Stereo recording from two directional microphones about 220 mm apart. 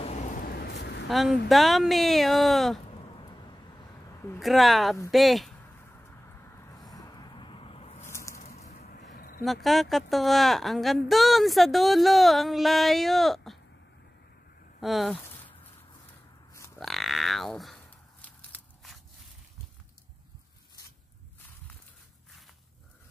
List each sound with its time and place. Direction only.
0.0 s a sound: 30° left (ahead or behind); by 1.0 s 50° left (ahead or behind)
1.0 s speech: centre (ahead or behind)
4.4 s speech: centre (ahead or behind)
6.2 s vehicle: 10° left (ahead or behind); by 8.0 s 25° left (ahead or behind)
8.0 s a sound: 15° left (ahead or behind)
8.4 s a sound: 35° left (ahead or behind)
9.4 s speech: centre (ahead or behind)
14.8 s speech: centre (ahead or behind)
16.7 s grunt: centre (ahead or behind)
18.2 s walk: 5° left (ahead or behind)